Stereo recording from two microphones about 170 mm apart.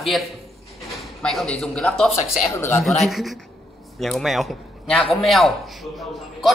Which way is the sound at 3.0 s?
Centre (ahead or behind).